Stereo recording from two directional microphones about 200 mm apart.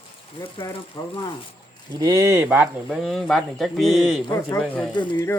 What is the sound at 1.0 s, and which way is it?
Speech, 20° left (ahead or behind).